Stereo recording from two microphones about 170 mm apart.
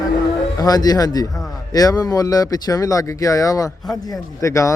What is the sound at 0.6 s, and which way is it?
A man's voice, 20° left (ahead or behind).